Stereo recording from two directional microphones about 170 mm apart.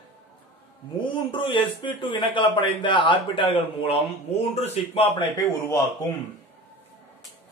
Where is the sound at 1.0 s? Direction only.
30° left (ahead or behind).